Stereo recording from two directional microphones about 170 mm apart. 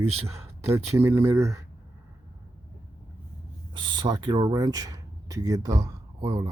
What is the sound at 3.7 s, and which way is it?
Speech, 25° right (ahead or behind).